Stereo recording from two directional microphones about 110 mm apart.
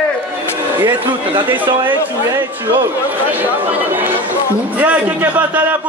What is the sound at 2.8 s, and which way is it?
A man's voice, 15° right (ahead or behind).